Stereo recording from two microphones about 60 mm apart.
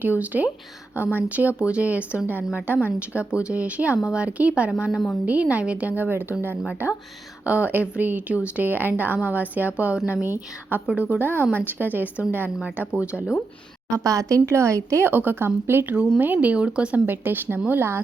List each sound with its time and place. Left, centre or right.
0.0 s a woman's voice: right
4.9 s a woman's voice: centre
5.2 s a woman's voice: right
10.2 s speech: right
10.9 s a woman's voice: right
14.0 s a woman's voice: right
15.0 s speech: right
16.0 s a woman's voice: right
17.1 s speech: right